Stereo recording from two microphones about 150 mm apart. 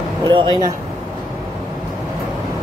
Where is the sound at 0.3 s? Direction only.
30° right (ahead or behind).